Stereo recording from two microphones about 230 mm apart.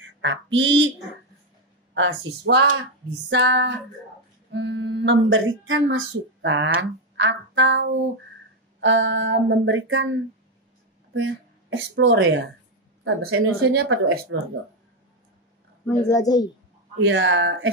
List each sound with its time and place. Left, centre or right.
0.2 s a woman's voice: right
2.0 s speech: right
11.1 s speech: right
15.9 s speech: centre
17.1 s speech: right